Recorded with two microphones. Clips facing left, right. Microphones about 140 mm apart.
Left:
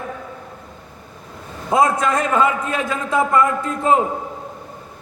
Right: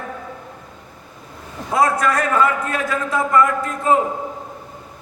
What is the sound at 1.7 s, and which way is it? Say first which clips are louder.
A man's voice: left 1 dB; 20° left (ahead or behind).